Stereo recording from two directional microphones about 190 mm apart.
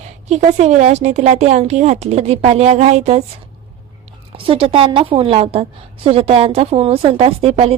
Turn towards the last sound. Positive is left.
turn(degrees=-30)  # may be behind; listen again after turning